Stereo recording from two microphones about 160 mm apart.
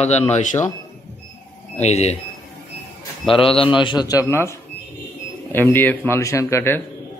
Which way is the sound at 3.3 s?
35° left (ahead or behind).